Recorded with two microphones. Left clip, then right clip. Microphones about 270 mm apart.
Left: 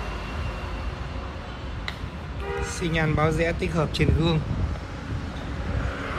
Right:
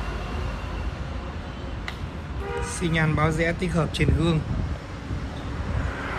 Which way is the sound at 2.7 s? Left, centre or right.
Centre.